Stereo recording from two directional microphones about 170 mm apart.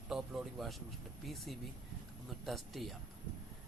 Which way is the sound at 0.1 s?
5° right (ahead or behind).